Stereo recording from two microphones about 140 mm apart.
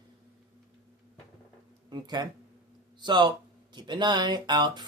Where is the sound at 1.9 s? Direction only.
30° right (ahead or behind).